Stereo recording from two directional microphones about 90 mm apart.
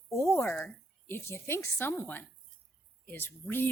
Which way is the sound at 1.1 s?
25° left (ahead or behind).